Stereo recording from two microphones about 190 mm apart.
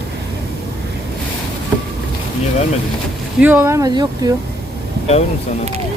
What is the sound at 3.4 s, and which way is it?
Speech, 10° right (ahead or behind).